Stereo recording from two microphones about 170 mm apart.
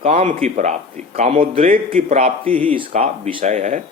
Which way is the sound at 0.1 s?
50° right (ahead or behind).